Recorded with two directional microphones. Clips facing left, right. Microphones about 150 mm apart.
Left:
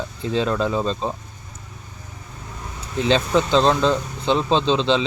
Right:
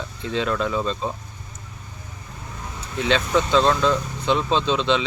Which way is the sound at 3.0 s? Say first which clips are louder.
Left 2 dB; 35° left (ahead or behind).